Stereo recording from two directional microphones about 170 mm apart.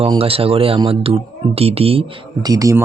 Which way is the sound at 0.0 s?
35° right (ahead or behind).